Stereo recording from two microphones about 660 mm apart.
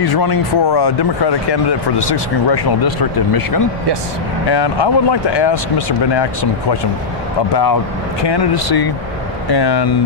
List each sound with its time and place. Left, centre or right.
0.0 s speech: left
7.5 s speech: left